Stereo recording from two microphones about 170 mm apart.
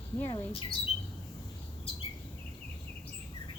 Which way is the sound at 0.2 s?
20° left (ahead or behind).